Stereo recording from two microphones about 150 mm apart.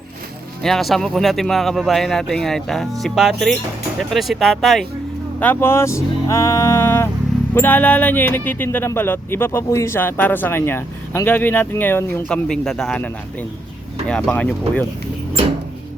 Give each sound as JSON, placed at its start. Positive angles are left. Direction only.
{"t": 0.6, "sound": "speech", "side_deg": 0}
{"t": 5.4, "sound": "speech", "side_deg": 15}
{"t": 12.5, "sound": "speech", "side_deg": 5}
{"t": 14.1, "sound": "speech", "side_deg": 5}